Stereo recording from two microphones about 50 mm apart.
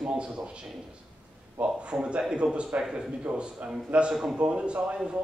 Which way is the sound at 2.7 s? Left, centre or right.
Right.